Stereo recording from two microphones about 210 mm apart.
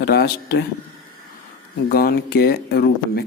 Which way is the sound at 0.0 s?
50° left (ahead or behind).